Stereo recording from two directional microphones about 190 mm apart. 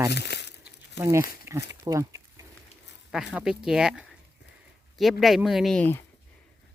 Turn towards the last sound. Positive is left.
turn(degrees=10)  # may be behind; listen again after turning